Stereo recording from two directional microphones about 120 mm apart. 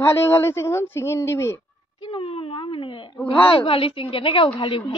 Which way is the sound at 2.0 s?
50° left (ahead or behind).